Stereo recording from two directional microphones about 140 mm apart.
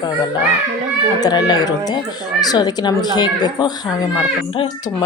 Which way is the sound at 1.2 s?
30° left (ahead or behind).